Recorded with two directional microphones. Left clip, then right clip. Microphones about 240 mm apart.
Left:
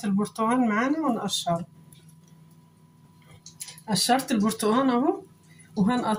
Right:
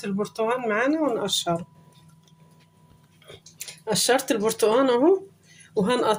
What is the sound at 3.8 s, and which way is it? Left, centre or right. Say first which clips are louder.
Speech: right 2 dB; right.